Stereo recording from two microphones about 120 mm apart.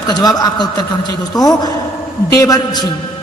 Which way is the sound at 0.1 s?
35° left (ahead or behind).